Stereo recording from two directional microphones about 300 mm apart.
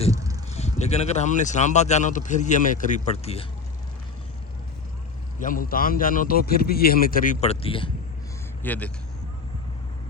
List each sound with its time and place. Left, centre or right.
0.1 s a sound: centre
0.5 s speech: left
5.4 s speech: left
8.6 s speech: centre